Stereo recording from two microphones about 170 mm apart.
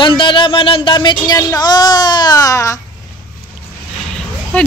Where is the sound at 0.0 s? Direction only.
30° left (ahead or behind).